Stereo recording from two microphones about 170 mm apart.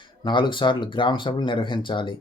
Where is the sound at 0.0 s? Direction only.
30° left (ahead or behind).